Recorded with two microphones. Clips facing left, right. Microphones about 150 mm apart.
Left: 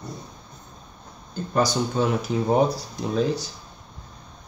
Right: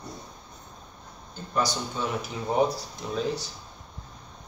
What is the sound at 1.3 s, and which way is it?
Speech, 40° left (ahead or behind).